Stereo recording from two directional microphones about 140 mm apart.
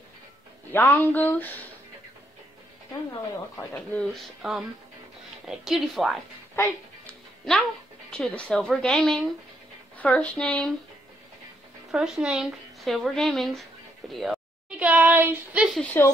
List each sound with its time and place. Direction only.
0.7 s speech: 15° left (ahead or behind)
3.7 s speech: 5° left (ahead or behind)
6.5 s music: 15° left (ahead or behind)
8.1 s speech: 5° left (ahead or behind)
11.9 s speech: 5° right (ahead or behind)
14.8 s speech: 10° right (ahead or behind)
15.8 s speech: 15° left (ahead or behind)